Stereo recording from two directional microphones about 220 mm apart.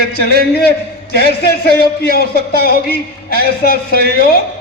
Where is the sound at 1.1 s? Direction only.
45° left (ahead or behind).